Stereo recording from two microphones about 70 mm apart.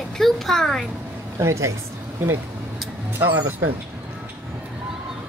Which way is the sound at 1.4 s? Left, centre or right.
Right.